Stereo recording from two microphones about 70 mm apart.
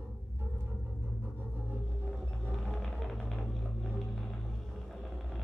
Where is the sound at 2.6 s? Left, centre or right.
Centre.